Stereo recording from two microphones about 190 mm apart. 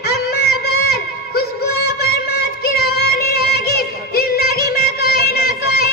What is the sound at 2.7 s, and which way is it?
Music, 55° left (ahead or behind).